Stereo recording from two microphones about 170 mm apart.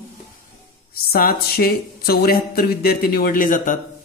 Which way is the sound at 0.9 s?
60° left (ahead or behind).